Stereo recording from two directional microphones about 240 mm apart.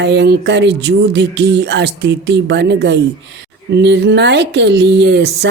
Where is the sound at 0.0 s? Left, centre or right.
Right.